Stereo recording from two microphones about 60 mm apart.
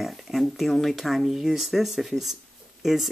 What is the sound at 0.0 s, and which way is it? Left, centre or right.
Speech, centre.